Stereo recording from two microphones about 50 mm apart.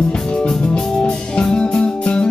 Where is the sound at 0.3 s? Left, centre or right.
Centre.